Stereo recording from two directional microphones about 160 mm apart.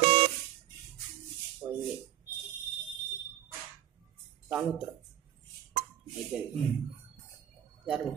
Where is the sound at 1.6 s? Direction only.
20° right (ahead or behind).